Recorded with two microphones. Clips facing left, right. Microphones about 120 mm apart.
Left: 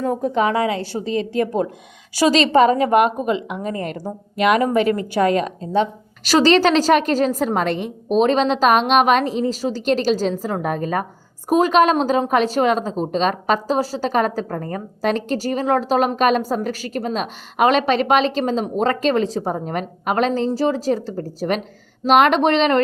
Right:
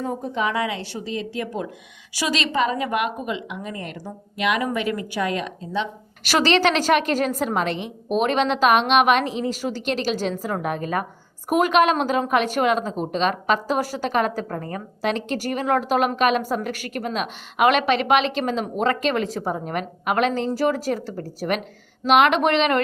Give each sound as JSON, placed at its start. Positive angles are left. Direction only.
{"t": 0.0, "sound": "a woman's voice", "side_deg": 55}
{"t": 0.4, "sound": "a woman's voice", "side_deg": 35}
{"t": 8.1, "sound": "a woman's voice", "side_deg": 30}